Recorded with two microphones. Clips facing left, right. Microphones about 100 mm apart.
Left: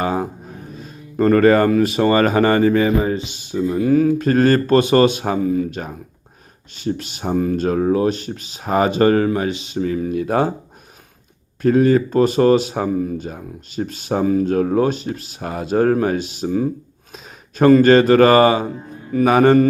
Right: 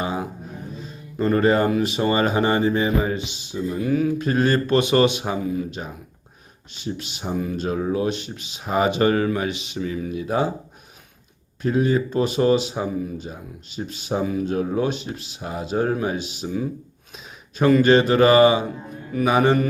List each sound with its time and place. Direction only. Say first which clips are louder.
0.0 s a sound: left 5 dB; 50° left (ahead or behind)
1.1 s speech: left 6 dB; 60° left (ahead or behind)
3.0 s speech: left 4 dB; 35° left (ahead or behind)
3.3 s speech: left 6 dB; 50° left (ahead or behind)
11.6 s speech: left 6 dB; 50° left (ahead or behind)